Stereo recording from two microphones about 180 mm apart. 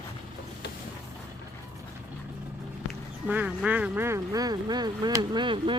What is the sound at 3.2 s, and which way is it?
Speech, 10° right (ahead or behind).